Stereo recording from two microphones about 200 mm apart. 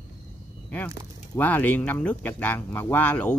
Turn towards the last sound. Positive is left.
turn(degrees=5)  # may be behind; listen again after turning